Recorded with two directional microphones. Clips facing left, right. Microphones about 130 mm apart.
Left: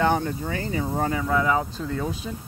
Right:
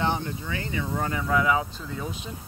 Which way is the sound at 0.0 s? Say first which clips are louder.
Left 5 dB; 50° left (ahead or behind).